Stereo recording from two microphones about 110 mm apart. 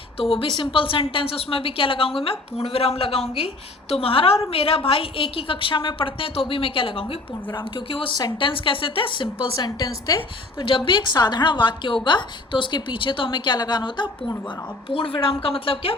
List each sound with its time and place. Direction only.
0.2 s a woman's voice: 55° left (ahead or behind)
9.6 s a woman's voice: 40° left (ahead or behind)
10.2 s a woman's voice: 50° left (ahead or behind)
14.8 s a woman's voice: 60° left (ahead or behind)